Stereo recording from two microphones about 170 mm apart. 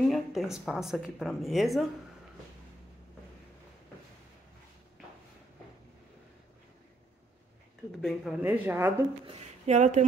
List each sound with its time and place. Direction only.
0.1 s speech: centre (ahead or behind)
8.0 s speech: centre (ahead or behind)
8.5 s speech: 10° right (ahead or behind)
9.2 s speech: 40° right (ahead or behind)